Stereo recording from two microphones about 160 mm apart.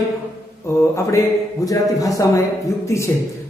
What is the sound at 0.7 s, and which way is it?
Mantra, 20° left (ahead or behind).